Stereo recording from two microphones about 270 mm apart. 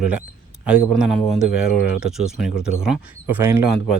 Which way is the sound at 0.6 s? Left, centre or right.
Centre.